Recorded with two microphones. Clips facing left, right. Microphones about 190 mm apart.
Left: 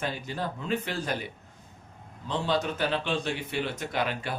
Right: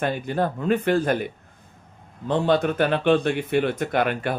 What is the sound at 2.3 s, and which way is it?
A man's voice, 55° right (ahead or behind).